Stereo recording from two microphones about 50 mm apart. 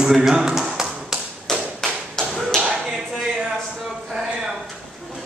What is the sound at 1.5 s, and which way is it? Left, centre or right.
Tap, centre.